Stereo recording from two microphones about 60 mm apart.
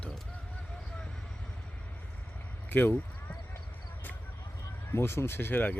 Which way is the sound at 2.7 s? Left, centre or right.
Left.